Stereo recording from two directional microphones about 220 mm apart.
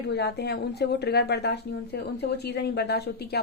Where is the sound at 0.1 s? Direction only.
50° left (ahead or behind).